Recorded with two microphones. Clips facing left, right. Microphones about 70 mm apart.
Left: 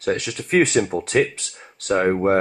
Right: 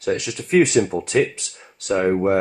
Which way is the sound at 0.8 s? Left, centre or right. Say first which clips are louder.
Right 1 dB; centre.